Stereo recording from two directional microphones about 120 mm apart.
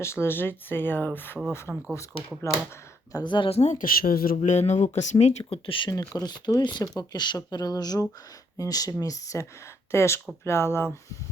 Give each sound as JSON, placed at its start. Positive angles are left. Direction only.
{"t": 0.0, "sound": "speech", "side_deg": 20}
{"t": 1.7, "sound": "speech", "side_deg": -5}
{"t": 2.4, "sound": "speech", "side_deg": 25}
{"t": 3.1, "sound": "speech", "side_deg": 35}
{"t": 3.5, "sound": "speech", "side_deg": 75}
{"t": 5.1, "sound": "speech", "side_deg": 60}
{"t": 5.9, "sound": "speech", "side_deg": 30}